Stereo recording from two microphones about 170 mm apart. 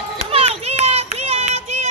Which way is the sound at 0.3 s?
35° right (ahead or behind).